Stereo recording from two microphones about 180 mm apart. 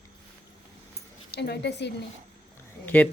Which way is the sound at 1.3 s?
70° left (ahead or behind).